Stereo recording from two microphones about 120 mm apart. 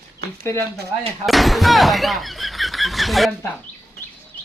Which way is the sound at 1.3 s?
Centre (ahead or behind).